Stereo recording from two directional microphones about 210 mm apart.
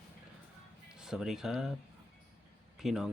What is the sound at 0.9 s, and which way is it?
Speech, 5° right (ahead or behind).